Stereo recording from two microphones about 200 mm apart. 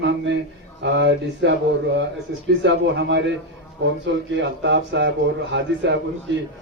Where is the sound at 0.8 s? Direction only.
60° right (ahead or behind).